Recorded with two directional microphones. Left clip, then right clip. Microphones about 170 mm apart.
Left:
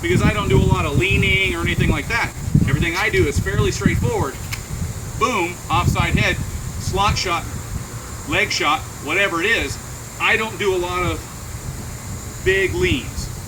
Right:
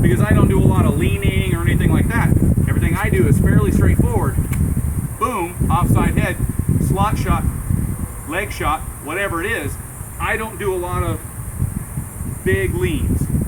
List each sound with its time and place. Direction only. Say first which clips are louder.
0.1 s speech: even; 10° right (ahead or behind)
12.5 s speech: left 2 dB; 5° right (ahead or behind)